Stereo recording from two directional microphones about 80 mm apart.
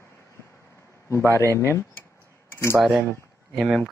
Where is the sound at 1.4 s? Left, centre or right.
Right.